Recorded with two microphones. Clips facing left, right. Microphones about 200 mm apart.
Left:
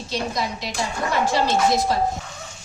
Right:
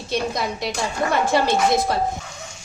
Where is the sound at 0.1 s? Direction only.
55° right (ahead or behind).